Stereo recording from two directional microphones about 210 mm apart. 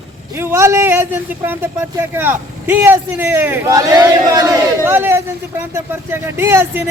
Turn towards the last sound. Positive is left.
turn(degrees=-10)  # may be behind; listen again after turning